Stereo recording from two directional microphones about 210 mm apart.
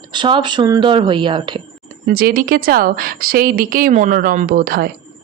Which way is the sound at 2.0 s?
45° right (ahead or behind).